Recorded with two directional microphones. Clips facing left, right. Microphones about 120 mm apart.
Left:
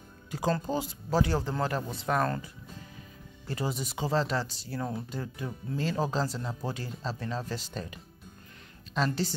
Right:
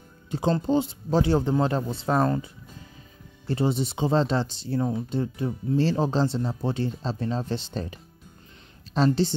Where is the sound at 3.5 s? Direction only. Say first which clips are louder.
Right 8 dB; 25° right (ahead or behind).